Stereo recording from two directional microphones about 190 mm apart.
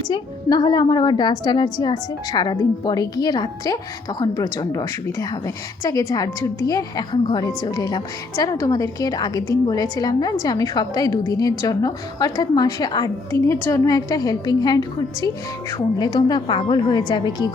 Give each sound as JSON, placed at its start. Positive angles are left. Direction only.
{"t": 0.1, "sound": "a woman's voice", "side_deg": 20}